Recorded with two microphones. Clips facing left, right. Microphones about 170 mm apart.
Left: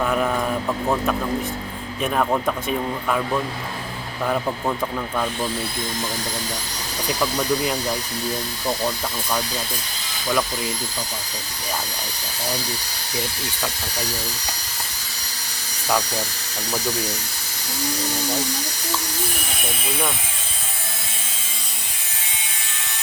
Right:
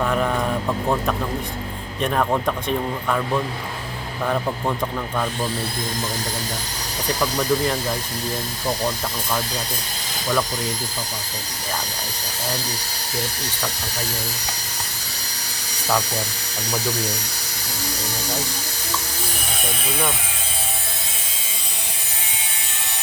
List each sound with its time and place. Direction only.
0.0 s a man's voice: centre (ahead or behind)
7.1 s a man's voice: 5° left (ahead or behind)